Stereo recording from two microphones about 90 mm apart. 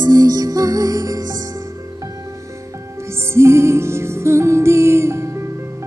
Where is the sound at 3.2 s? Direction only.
30° right (ahead or behind).